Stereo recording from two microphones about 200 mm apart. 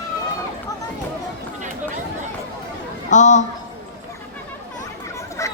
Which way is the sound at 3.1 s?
35° left (ahead or behind).